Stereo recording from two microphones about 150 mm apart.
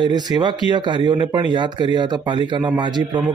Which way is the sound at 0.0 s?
30° right (ahead or behind).